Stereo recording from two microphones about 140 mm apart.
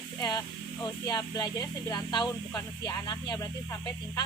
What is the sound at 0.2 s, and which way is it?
Speech, 25° left (ahead or behind).